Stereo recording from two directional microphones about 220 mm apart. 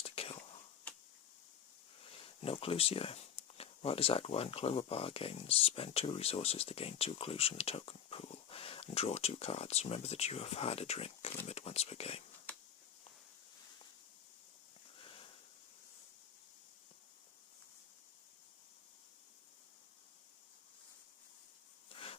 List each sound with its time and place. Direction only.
0.0 s whispering: 25° left (ahead or behind)
2.0 s speech: 25° left (ahead or behind)
21.9 s a sound: 25° left (ahead or behind)